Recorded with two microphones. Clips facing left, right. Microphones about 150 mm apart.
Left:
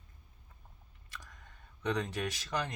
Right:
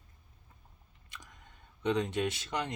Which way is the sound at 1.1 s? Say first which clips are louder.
Left 1 dB; 20° right (ahead or behind).